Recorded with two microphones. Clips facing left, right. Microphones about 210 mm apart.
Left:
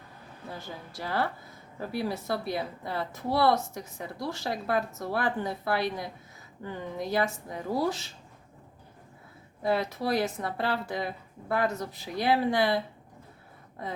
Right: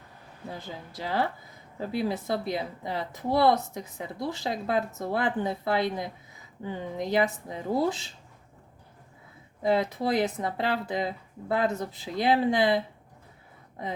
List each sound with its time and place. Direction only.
0.5 s speech: 20° right (ahead or behind)
9.6 s speech: 20° right (ahead or behind)